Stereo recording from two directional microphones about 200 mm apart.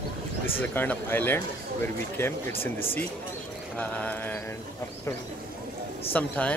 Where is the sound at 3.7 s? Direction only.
10° left (ahead or behind).